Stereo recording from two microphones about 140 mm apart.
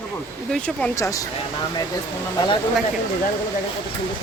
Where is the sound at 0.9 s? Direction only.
20° left (ahead or behind).